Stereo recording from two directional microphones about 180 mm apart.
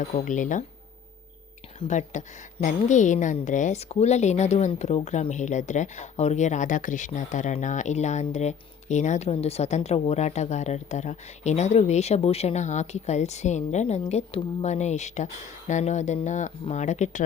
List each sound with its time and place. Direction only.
0.1 s speech: 40° left (ahead or behind)
1.8 s a woman's voice: 40° left (ahead or behind)